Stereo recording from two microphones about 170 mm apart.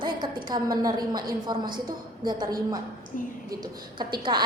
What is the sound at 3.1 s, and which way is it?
Speech, 50° left (ahead or behind).